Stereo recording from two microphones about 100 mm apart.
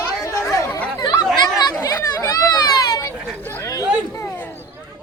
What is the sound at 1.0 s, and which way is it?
Chatter, 45° left (ahead or behind).